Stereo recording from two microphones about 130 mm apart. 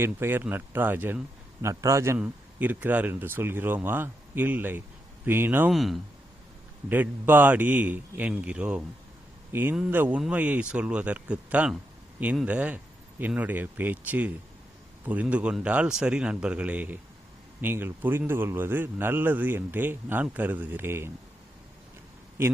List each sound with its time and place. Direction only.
0.0 s a man's voice: 15° right (ahead or behind)
2.1 s a man's voice: 10° right (ahead or behind)
5.7 s speech: centre (ahead or behind)
6.8 s a man's voice: 15° right (ahead or behind)